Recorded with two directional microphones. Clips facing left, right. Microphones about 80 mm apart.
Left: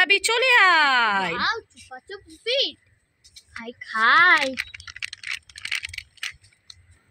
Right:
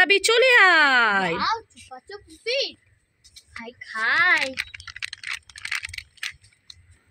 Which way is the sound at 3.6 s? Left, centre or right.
Left.